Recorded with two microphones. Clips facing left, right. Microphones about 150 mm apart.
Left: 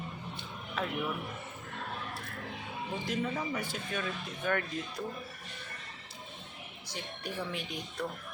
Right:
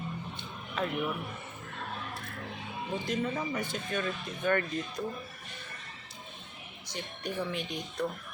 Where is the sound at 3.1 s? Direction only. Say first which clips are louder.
Right 1 dB; centre (ahead or behind).